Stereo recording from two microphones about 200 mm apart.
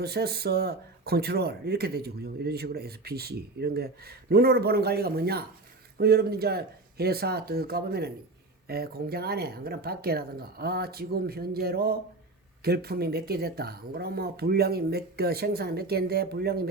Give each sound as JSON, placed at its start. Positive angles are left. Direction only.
{"t": 0.0, "sound": "speech", "side_deg": -50}